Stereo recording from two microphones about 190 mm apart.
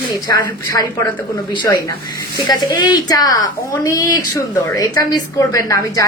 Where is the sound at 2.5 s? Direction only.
20° left (ahead or behind).